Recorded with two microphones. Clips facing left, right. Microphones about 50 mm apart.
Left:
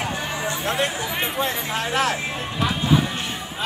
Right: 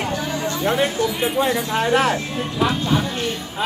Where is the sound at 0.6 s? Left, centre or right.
Centre.